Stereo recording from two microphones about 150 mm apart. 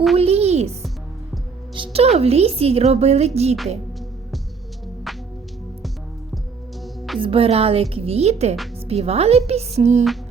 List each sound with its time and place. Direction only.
0.2 s a sound: 40° right (ahead or behind)
1.7 s a woman's voice: 35° right (ahead or behind)
5.1 s music: centre (ahead or behind)
6.8 s music: centre (ahead or behind)
7.2 s a woman's voice: 40° right (ahead or behind)